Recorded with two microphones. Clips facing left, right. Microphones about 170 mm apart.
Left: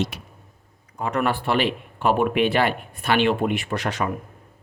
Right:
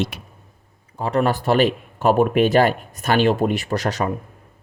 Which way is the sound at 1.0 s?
35° right (ahead or behind).